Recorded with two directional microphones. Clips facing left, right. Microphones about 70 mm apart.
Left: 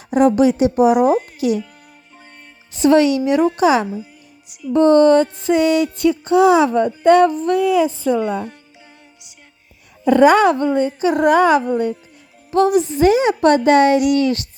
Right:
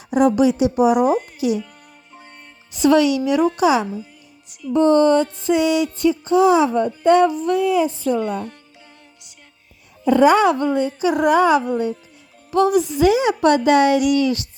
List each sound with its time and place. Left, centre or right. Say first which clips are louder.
0.1 s a sound: left 2 dB; left
0.9 s speech: left 2 dB; centre
1.4 s speech: left 2 dB; left
2.8 s a woman's voice: left 2 dB; left
3.6 s a sound: left 2 dB; left
4.4 s music: left 2 dB; centre
4.7 s music: left 3 dB; left
7.3 s a sound: left 2 dB; left
7.6 s speech: left 3 dB; left
8.1 s a woman's voice: left 2 dB; centre
10.1 s music: left 2 dB; left
10.8 s a sound: left 2 dB; left
12.5 s a woman's voice: left 2 dB; left